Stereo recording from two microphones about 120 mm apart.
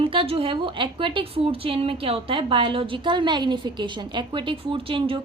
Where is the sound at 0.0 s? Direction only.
50° right (ahead or behind).